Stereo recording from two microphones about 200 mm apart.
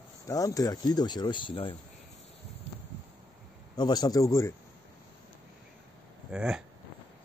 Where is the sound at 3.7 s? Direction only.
20° left (ahead or behind).